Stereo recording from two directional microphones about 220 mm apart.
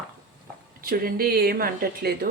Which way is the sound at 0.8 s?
40° right (ahead or behind).